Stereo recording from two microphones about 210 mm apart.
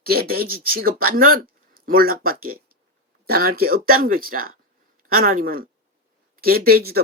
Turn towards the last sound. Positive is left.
turn(degrees=-45)  # may be behind; listen again after turning